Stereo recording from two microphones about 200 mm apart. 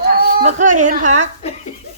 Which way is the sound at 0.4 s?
40° right (ahead or behind).